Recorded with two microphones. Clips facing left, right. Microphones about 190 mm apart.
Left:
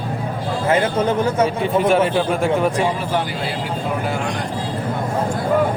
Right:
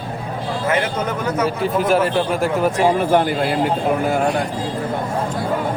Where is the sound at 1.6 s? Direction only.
Centre (ahead or behind).